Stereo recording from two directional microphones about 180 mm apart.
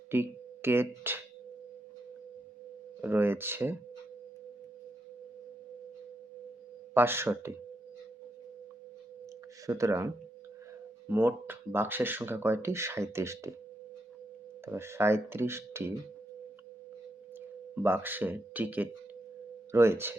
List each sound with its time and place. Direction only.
0.1 s speech: 10° right (ahead or behind)
3.0 s speech: 10° right (ahead or behind)
6.9 s speech: 10° right (ahead or behind)
9.6 s speech: 15° right (ahead or behind)
11.1 s speech: 10° right (ahead or behind)
14.6 s speech: 15° right (ahead or behind)
17.8 s speech: 10° right (ahead or behind)